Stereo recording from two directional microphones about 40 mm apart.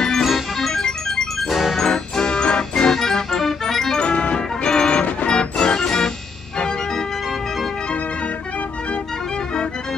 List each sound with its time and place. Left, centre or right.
0.2 s music: centre
1.8 s music: centre
2.7 s music: centre
4.0 s music: left